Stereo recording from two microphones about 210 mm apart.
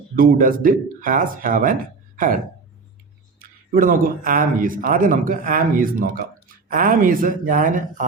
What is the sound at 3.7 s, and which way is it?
A man's voice, 40° right (ahead or behind).